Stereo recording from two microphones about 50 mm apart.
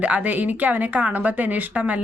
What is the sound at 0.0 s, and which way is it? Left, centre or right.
A woman's voice, right.